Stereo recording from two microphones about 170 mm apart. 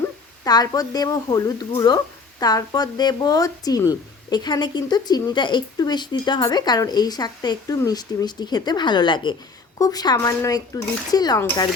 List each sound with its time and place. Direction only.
0.4 s speech: 20° left (ahead or behind)